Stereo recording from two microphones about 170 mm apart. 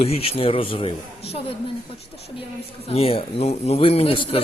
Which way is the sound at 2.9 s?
35° left (ahead or behind).